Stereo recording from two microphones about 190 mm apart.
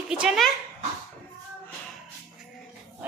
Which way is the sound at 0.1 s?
5° right (ahead or behind).